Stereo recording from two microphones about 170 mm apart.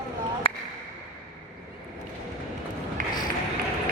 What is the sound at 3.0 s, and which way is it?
Run, 55° right (ahead or behind).